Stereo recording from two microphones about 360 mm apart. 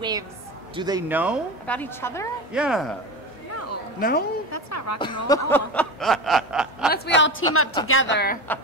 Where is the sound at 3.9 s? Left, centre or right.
Left.